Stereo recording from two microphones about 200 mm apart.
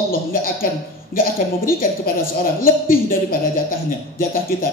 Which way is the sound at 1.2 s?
45° left (ahead or behind).